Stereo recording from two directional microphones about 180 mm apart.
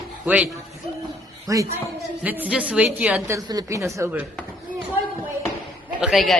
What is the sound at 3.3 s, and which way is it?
Speech, 20° right (ahead or behind).